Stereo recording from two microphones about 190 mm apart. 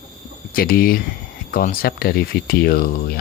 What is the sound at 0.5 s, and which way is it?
Speech, 50° left (ahead or behind).